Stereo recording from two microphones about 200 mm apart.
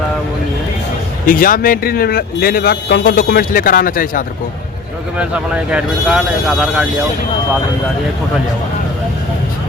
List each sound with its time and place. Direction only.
1.3 s speech: 45° left (ahead or behind)
5.7 s speech: 5° right (ahead or behind)